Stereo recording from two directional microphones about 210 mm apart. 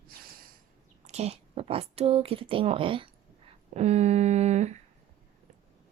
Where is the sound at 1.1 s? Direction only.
30° right (ahead or behind).